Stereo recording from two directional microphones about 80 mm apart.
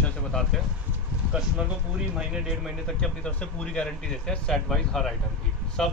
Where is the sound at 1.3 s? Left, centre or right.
Centre.